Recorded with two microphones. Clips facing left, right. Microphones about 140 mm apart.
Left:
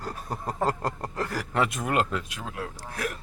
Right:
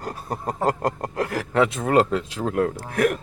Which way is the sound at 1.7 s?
30° right (ahead or behind).